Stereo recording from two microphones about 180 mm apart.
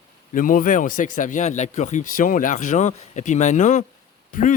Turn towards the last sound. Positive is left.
turn(degrees=45)  # may be behind; listen again after turning